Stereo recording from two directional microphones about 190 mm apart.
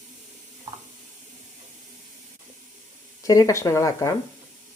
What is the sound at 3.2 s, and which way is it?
Speech, 20° left (ahead or behind).